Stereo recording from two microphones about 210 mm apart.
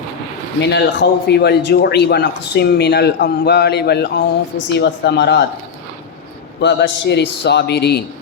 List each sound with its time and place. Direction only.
0.6 s a man's voice: 55° left (ahead or behind)
6.6 s a man's voice: 55° left (ahead or behind)